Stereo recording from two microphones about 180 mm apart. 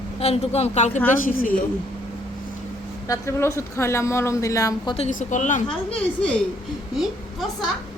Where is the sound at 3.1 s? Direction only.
15° left (ahead or behind).